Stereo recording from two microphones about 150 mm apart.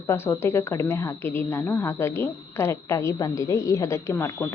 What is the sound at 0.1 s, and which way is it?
A woman's voice, 15° left (ahead or behind).